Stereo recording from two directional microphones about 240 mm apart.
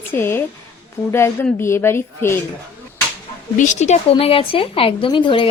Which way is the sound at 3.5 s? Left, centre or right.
Left.